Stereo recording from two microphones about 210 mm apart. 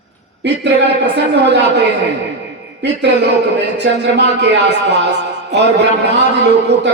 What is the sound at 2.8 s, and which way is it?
A man's voice, 55° right (ahead or behind).